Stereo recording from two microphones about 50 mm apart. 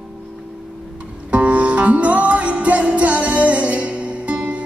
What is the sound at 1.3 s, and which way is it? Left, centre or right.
Music, right.